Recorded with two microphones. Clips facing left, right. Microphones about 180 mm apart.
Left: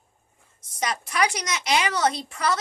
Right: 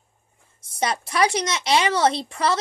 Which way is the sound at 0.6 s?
30° right (ahead or behind).